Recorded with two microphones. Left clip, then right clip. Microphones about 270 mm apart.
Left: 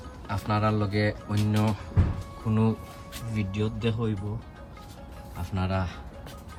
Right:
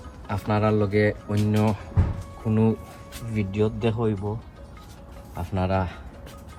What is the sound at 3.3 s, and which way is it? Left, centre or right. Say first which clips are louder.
Speech: right 7 dB; centre.